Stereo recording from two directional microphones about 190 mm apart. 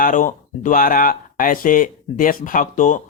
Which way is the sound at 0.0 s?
45° left (ahead or behind).